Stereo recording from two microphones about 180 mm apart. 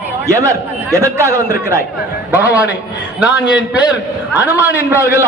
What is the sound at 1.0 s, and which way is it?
Speech, 15° right (ahead or behind).